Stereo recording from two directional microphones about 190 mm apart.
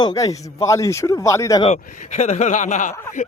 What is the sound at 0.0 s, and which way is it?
Speech, 20° left (ahead or behind).